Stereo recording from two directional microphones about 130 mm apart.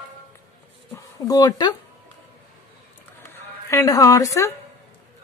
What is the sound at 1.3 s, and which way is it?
Speech, 30° left (ahead or behind).